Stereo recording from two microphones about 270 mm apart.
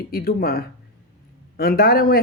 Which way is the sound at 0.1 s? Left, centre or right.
Left.